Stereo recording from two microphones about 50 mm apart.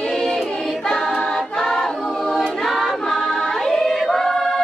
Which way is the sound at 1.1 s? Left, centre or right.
Centre.